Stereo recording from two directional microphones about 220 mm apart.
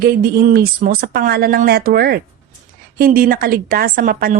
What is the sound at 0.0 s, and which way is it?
A woman's voice, 45° right (ahead or behind).